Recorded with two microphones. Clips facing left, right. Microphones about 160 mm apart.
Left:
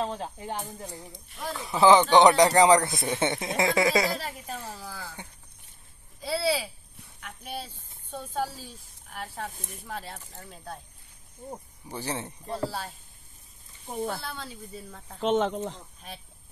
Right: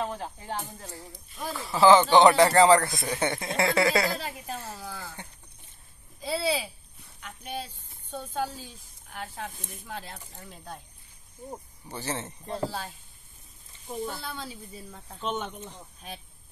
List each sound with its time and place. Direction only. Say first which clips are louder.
0.0 s speech: left 2 dB; 25° left (ahead or behind)
4.7 s speech: right 1 dB; 5° left (ahead or behind)
11.9 s speech: left 1 dB; 15° left (ahead or behind)
12.4 s speech: even; 5° left (ahead or behind)
13.8 s speech: left 2 dB; 60° left (ahead or behind)
14.2 s speech: even; centre (ahead or behind)
15.1 s speech: left 8 dB; 90° left